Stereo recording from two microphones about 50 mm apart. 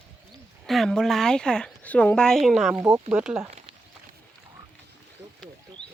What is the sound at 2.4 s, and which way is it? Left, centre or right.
Speech, centre.